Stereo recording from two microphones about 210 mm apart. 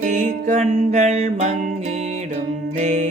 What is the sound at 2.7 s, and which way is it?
Music, 30° right (ahead or behind).